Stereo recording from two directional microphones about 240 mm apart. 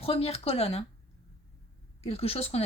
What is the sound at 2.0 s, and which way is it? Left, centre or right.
Speech, left.